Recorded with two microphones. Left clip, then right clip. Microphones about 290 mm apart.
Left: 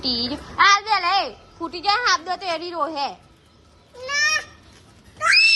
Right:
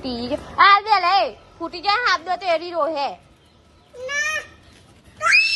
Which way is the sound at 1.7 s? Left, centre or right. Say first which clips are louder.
Even; centre.